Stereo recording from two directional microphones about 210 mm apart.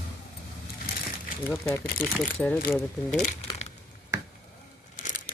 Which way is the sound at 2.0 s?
5° left (ahead or behind).